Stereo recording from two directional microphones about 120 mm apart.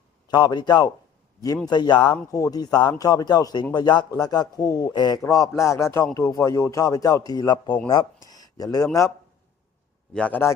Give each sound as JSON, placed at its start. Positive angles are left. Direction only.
{"t": 0.3, "sound": "speech", "side_deg": 40}
{"t": 10.1, "sound": "a man's voice", "side_deg": 10}